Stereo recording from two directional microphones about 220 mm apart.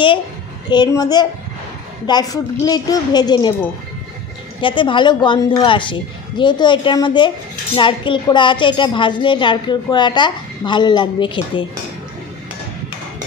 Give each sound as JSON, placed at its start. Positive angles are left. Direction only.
{"t": 0.7, "sound": "a woman's voice", "side_deg": 20}
{"t": 4.6, "sound": "a woman's voice", "side_deg": 20}